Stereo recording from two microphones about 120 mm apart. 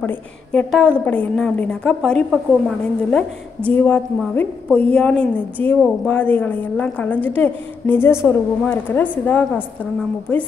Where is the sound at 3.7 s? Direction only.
15° left (ahead or behind).